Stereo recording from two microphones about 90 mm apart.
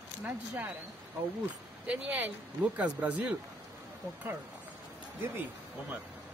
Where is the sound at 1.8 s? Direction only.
15° right (ahead or behind).